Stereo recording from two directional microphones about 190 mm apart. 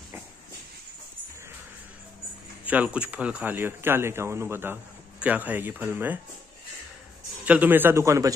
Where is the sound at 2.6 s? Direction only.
5° right (ahead or behind).